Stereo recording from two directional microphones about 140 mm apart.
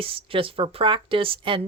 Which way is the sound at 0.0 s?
40° right (ahead or behind).